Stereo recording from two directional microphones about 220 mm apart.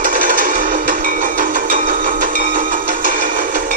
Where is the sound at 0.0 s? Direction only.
35° right (ahead or behind).